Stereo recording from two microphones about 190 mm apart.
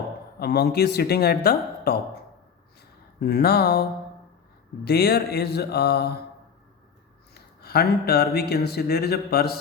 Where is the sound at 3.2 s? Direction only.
55° left (ahead or behind).